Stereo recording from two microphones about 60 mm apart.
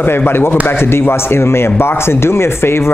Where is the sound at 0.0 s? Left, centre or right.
Left.